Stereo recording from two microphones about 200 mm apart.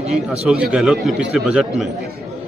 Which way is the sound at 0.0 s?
30° right (ahead or behind).